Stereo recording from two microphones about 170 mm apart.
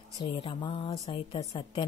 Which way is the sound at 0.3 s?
30° left (ahead or behind).